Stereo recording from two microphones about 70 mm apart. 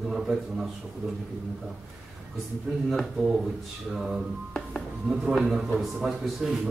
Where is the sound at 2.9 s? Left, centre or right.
Centre.